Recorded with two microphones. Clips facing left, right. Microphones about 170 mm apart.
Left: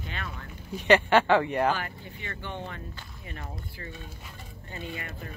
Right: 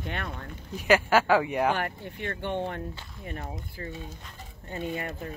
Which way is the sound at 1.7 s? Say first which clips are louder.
Right 3 dB; 60° right (ahead or behind).